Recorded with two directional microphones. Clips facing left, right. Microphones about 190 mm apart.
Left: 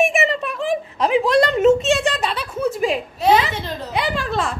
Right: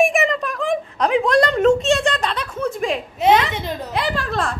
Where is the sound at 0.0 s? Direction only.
Centre (ahead or behind).